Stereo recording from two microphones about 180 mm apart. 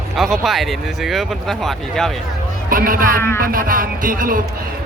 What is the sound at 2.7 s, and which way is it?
Speech, 50° right (ahead or behind).